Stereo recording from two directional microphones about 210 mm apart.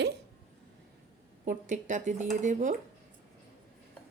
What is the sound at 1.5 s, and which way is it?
Speech, 35° right (ahead or behind).